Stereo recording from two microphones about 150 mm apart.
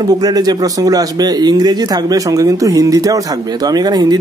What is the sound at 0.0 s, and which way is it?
Speech, 25° right (ahead or behind).